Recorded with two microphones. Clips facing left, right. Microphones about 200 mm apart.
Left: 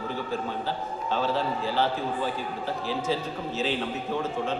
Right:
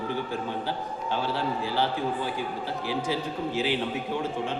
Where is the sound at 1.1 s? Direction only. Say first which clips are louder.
Left 2 dB; 15° right (ahead or behind).